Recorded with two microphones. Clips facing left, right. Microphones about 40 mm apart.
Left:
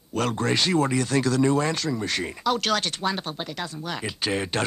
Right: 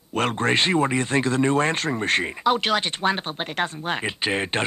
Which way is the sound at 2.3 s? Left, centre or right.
Right.